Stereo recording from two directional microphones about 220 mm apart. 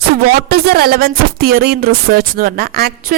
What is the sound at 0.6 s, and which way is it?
A woman's voice, 45° right (ahead or behind).